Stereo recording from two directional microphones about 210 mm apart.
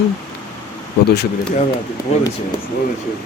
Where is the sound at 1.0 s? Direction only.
50° left (ahead or behind).